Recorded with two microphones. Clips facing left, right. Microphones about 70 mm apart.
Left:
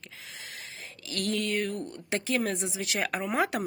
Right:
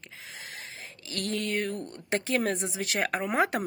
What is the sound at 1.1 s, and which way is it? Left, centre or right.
Speech, right.